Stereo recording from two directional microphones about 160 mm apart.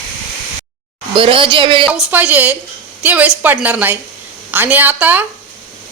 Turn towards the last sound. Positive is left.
turn(degrees=-10)  # may be behind; listen again after turning